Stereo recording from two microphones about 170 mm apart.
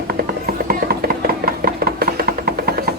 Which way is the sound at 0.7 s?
60° right (ahead or behind).